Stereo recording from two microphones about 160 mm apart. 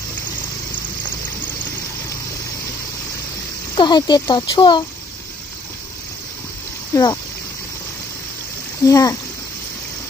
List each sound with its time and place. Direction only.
3.7 s speech: 25° left (ahead or behind)
6.9 s speech: 25° left (ahead or behind)
8.8 s speech: 20° left (ahead or behind)